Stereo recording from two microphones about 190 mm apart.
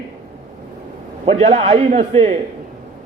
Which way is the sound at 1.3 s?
30° right (ahead or behind).